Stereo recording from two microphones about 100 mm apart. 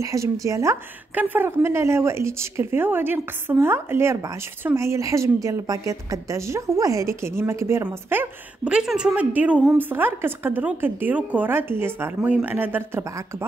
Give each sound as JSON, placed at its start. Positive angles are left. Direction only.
{"t": 0.0, "sound": "speech", "side_deg": -35}
{"t": 1.1, "sound": "a woman's voice", "side_deg": -20}
{"t": 8.6, "sound": "a woman's voice", "side_deg": -10}